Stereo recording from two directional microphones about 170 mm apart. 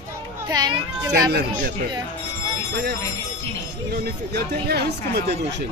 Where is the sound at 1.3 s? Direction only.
70° right (ahead or behind).